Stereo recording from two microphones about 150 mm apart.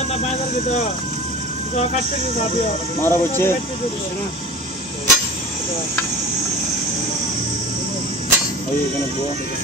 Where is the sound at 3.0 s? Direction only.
15° left (ahead or behind).